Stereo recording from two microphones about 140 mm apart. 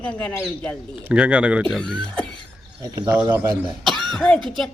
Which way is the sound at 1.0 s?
10° right (ahead or behind).